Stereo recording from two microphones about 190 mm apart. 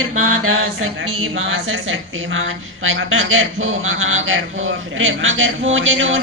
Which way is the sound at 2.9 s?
90° right.